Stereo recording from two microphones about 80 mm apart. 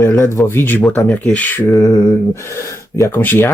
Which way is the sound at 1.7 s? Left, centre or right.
Left.